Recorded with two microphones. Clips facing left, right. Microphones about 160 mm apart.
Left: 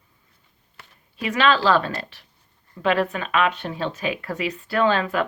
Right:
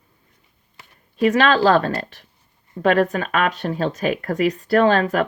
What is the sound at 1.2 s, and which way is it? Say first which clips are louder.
Speech: right 5 dB; 45° right (ahead or behind).